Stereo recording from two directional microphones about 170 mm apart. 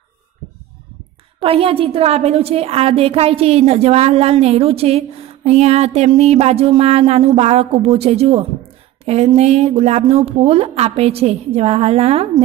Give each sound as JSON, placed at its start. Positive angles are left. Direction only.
{"t": 1.4, "sound": "a woman's voice", "side_deg": -35}